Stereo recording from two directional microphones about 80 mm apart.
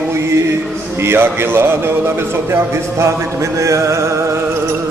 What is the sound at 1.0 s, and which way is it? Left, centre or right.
A man's voice, right.